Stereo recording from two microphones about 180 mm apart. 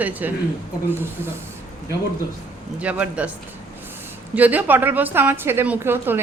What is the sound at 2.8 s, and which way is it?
Speech, 10° right (ahead or behind).